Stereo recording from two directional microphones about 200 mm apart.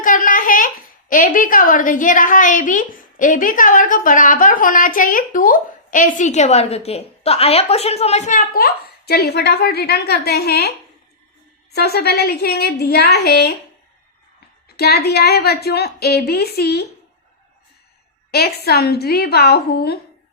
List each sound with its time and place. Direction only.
0.0 s a sound: 45° left (ahead or behind)
1.1 s a woman's voice: 40° left (ahead or behind)
11.7 s a woman's voice: 55° left (ahead or behind)
14.8 s a woman's voice: 55° left (ahead or behind)
18.3 s a woman's voice: 50° left (ahead or behind)